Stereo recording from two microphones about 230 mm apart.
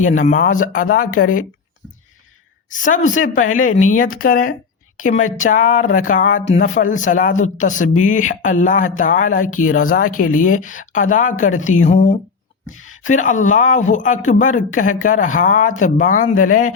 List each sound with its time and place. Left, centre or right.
0.0 s speech: left
2.6 s a woman's voice: left